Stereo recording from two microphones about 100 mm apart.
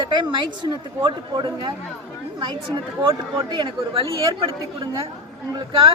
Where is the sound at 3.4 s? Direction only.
50° right (ahead or behind).